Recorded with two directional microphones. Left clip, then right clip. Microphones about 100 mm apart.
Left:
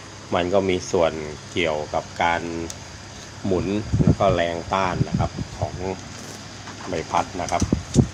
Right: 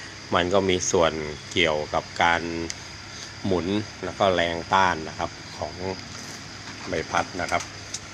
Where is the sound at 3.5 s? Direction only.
10° right (ahead or behind).